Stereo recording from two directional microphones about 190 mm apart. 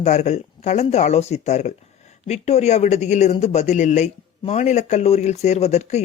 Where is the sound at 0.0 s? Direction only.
35° left (ahead or behind).